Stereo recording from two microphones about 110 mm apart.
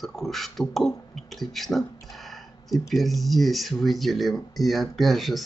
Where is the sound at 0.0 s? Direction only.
Centre (ahead or behind).